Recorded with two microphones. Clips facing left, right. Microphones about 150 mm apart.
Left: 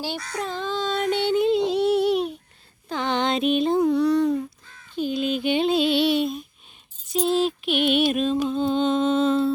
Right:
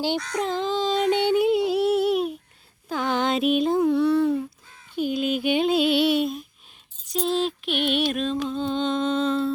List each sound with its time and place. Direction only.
0.3 s a sound: 20° right (ahead or behind); by 2.3 s centre (ahead or behind)
2.9 s speech: 5° right (ahead or behind)
4.9 s music: 10° right (ahead or behind)